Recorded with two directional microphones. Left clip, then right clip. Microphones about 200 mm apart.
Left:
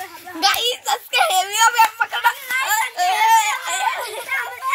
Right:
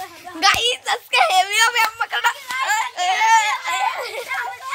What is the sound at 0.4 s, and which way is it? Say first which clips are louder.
A child's voice: right 2 dB; 5° right (ahead or behind).